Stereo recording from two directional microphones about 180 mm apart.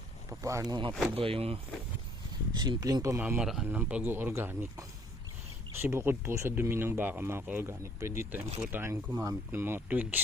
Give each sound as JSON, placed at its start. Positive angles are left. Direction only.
{"t": 0.3, "sound": "speech", "side_deg": -15}